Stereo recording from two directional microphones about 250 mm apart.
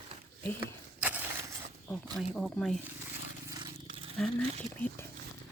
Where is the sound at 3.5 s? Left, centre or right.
Centre.